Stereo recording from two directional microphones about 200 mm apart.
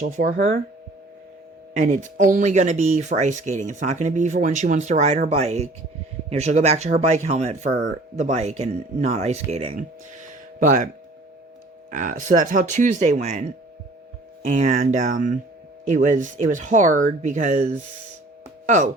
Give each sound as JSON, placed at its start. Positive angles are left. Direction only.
{"t": 0.0, "sound": "speech", "side_deg": -40}
{"t": 1.8, "sound": "speech", "side_deg": -40}
{"t": 11.9, "sound": "speech", "side_deg": -40}
{"t": 14.4, "sound": "speech", "side_deg": -40}